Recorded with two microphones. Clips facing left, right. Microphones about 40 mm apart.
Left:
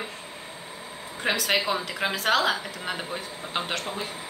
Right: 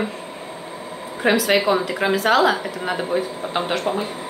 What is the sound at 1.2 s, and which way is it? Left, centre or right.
Speech, centre.